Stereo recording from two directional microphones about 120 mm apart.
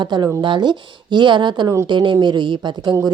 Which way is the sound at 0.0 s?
40° right (ahead or behind).